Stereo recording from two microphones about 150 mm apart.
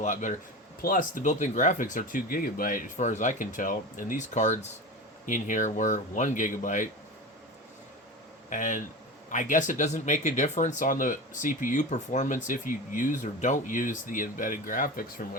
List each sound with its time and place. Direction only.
0.0 s speech: 55° left (ahead or behind)
0.8 s speech: 65° left (ahead or behind)
8.4 s speech: 60° left (ahead or behind)